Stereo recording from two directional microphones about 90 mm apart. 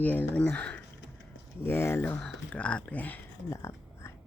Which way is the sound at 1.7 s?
25° left (ahead or behind).